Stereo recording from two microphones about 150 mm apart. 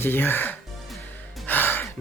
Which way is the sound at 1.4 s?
15° left (ahead or behind).